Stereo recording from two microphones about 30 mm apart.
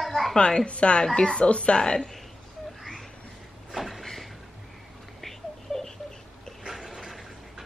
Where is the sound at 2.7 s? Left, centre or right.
Centre.